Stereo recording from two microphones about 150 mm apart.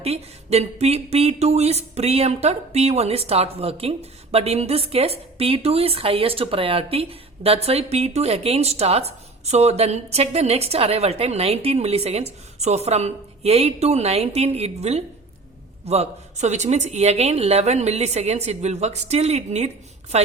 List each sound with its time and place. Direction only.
0.0 s speech: 45° right (ahead or behind)